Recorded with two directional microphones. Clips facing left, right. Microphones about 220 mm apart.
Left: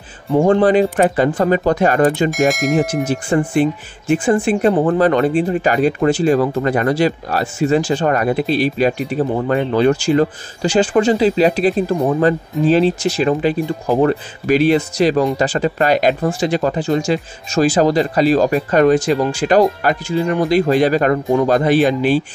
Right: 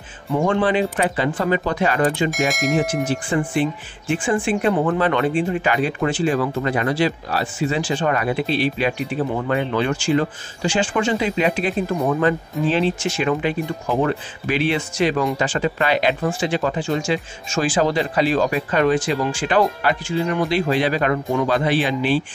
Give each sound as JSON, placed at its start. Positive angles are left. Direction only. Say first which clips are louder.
{"t": 0.3, "sound": "speech", "louder": "left 6 dB", "side_deg": 40}
{"t": 2.3, "sound": "speech", "louder": "left 5 dB", "side_deg": 0}
{"t": 3.1, "sound": "speech", "louder": "left 4 dB", "side_deg": 45}